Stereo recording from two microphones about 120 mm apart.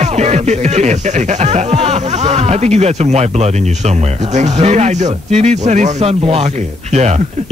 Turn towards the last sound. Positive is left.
turn(degrees=-70)  # may be behind; listen again after turning